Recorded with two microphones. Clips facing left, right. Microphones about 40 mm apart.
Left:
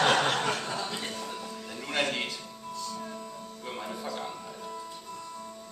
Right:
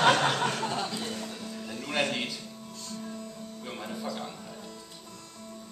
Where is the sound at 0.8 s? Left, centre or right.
Left.